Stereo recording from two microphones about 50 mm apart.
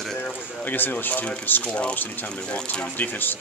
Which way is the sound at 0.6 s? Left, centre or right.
Left.